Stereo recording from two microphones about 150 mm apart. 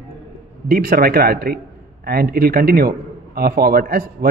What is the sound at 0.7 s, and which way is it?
A man's voice, 80° right.